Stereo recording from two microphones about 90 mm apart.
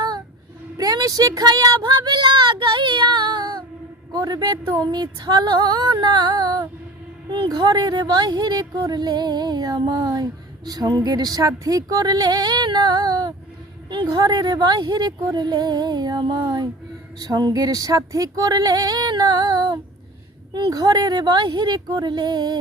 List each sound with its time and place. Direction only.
0.8 s speech: 45° right (ahead or behind)
4.1 s speech: 45° right (ahead or behind)